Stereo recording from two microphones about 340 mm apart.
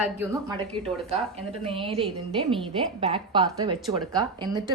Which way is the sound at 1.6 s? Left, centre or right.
Centre.